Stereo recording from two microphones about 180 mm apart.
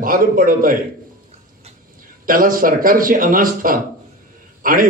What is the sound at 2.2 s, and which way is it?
A man's voice, 50° right (ahead or behind).